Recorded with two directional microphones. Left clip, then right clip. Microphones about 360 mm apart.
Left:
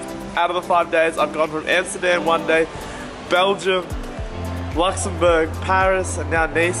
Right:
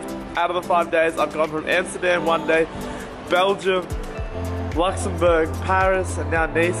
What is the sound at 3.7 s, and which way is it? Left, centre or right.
Speech, centre.